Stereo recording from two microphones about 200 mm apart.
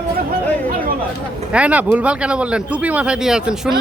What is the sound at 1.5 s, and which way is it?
Speech, 5° right (ahead or behind).